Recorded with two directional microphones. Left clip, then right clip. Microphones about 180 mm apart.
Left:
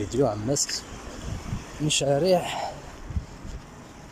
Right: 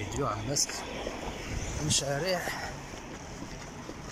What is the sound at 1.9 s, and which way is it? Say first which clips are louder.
Speech: left 9 dB; 50° left (ahead or behind).